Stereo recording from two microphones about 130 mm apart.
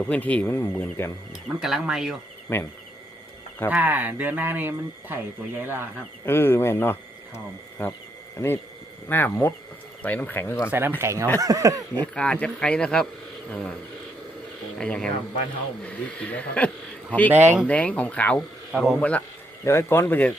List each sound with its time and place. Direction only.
0.1 s speech: 10° left (ahead or behind)
1.3 s speech: 5° right (ahead or behind)
2.5 s speech: 15° left (ahead or behind)
3.7 s speech: 15° right (ahead or behind)
6.2 s speech: 15° left (ahead or behind)
10.7 s speech: 15° right (ahead or behind)
12.1 s speech: 5° left (ahead or behind)
14.8 s speech: 5° left (ahead or behind)
19.6 s speech: 20° left (ahead or behind)